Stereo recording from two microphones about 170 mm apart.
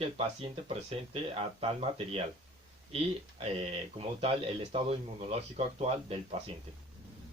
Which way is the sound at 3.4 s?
35° right (ahead or behind).